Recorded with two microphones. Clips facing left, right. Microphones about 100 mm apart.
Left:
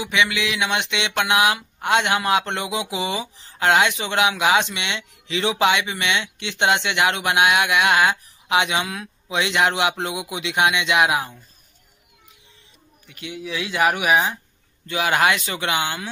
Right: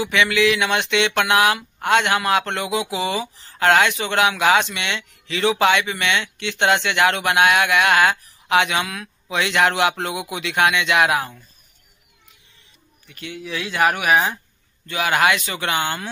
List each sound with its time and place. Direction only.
0.0 s speech: 15° left (ahead or behind)
13.1 s speech: 15° left (ahead or behind)
15.7 s speech: 10° left (ahead or behind)